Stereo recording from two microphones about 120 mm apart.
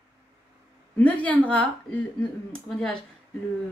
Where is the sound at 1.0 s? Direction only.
10° left (ahead or behind).